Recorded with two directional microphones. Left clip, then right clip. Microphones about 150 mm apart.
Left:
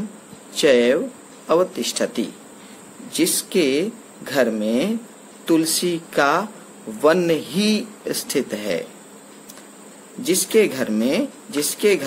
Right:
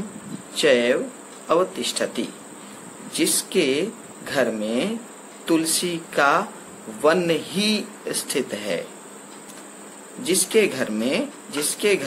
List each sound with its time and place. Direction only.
0.6 s speech: 90° left
10.2 s speech: 90° left